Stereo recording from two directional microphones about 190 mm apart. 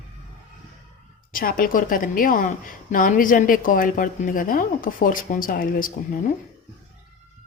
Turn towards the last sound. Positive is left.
turn(degrees=45)  # may be behind; listen again after turning